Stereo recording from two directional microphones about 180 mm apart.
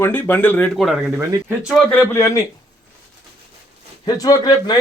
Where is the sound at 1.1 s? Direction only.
10° right (ahead or behind).